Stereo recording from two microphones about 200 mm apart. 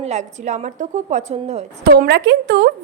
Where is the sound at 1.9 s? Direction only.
55° right (ahead or behind).